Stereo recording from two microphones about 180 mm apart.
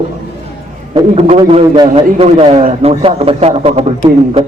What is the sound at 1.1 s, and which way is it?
A man's voice, 35° right (ahead or behind).